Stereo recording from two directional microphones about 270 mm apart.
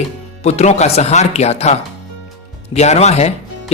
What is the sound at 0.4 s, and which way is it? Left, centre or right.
Speech, left.